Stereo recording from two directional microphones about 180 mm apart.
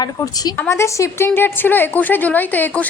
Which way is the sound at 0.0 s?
20° left (ahead or behind).